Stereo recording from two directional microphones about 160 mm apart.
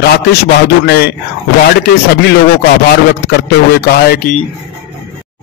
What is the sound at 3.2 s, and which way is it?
Speech, 85° left.